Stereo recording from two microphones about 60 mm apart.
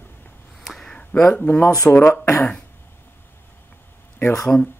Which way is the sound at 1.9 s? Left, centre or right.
Left.